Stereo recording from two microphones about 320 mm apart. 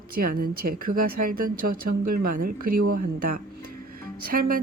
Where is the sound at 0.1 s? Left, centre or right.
Right.